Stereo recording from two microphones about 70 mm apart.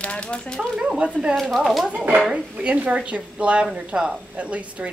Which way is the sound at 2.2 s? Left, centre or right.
Centre.